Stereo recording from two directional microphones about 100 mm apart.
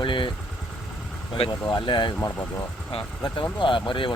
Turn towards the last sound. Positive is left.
turn(degrees=55)  # may be behind; listen again after turning